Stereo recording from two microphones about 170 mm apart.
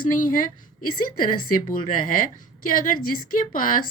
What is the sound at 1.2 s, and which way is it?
A woman's voice, 55° left (ahead or behind).